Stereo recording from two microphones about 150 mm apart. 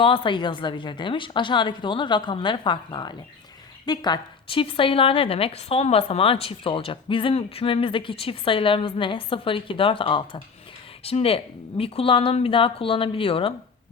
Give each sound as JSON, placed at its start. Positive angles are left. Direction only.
{"t": 0.0, "sound": "a woman's voice", "side_deg": 35}